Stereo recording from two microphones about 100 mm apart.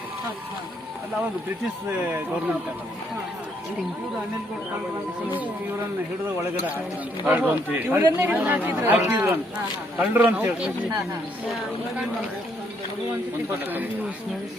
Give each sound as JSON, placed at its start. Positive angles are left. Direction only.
{"t": 5.3, "sound": "speech", "side_deg": -15}
{"t": 13.5, "sound": "speech", "side_deg": -20}